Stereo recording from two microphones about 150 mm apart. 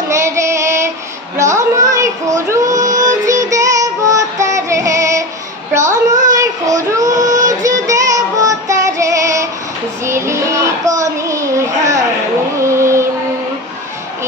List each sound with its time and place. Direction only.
0.1 s child singing: 20° right (ahead or behind)
3.3 s music: 20° right (ahead or behind)
5.7 s a sound: 20° right (ahead or behind)
6.3 s child singing: 20° right (ahead or behind)
12.5 s music: 20° right (ahead or behind)